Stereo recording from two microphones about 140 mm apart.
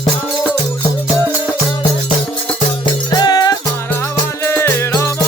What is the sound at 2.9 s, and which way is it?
Music, 30° left (ahead or behind).